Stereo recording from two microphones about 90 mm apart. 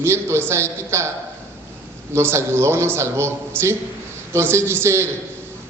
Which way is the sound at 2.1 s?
30° right (ahead or behind).